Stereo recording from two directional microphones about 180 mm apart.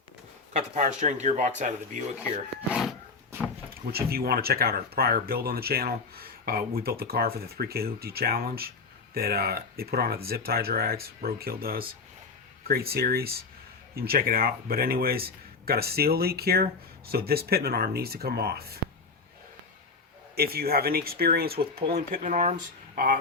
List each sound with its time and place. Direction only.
0.5 s speech: 45° right (ahead or behind)
3.9 s speech: 60° right (ahead or behind)
20.3 s speech: 60° right (ahead or behind)
22.2 s speech: 40° right (ahead or behind)